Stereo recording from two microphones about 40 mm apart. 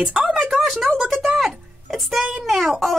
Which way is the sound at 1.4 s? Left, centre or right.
Centre.